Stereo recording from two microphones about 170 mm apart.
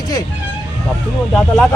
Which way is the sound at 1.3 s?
5° left (ahead or behind).